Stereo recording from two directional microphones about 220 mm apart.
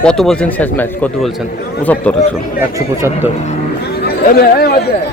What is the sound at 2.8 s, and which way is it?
Speech, 10° right (ahead or behind).